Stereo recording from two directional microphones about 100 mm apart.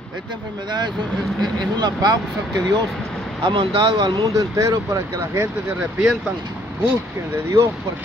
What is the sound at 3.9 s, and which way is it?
Speech, 40° right (ahead or behind).